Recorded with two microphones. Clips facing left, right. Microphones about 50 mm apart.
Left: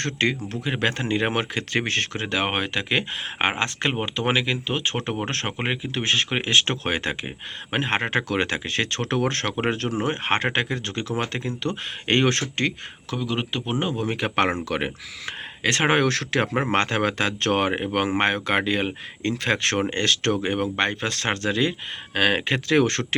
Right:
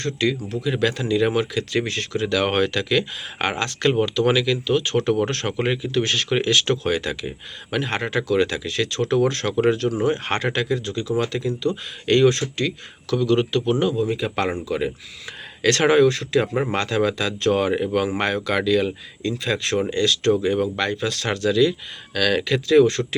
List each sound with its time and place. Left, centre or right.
0.0 s speech: left
2.4 s speech: left
13.1 s speech: centre
13.7 s speech: left
14.0 s speech: left
15.6 s speech: left
16.0 s speech: left
16.7 s speech: left
19.5 s speech: left
22.8 s speech: left